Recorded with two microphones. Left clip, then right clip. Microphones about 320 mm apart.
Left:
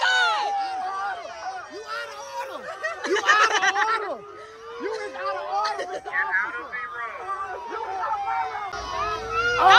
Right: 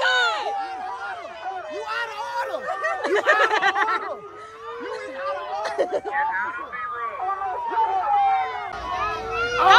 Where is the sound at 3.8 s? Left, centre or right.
Left.